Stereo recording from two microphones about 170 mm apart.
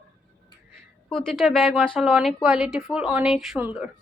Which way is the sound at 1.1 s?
Centre (ahead or behind).